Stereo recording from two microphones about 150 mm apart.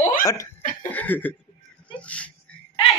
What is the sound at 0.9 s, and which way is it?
Chuckle, 10° left (ahead or behind).